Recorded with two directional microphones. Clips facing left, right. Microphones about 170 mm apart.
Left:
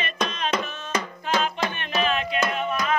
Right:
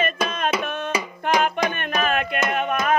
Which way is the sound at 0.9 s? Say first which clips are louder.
Right 2 dB; 10° right (ahead or behind).